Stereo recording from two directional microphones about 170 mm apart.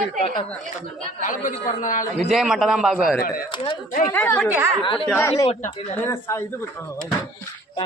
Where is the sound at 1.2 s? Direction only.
50° left (ahead or behind).